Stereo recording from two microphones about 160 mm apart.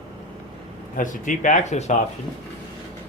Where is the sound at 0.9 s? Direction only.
55° left (ahead or behind).